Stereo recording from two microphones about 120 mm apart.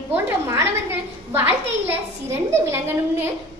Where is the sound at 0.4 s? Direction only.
20° right (ahead or behind).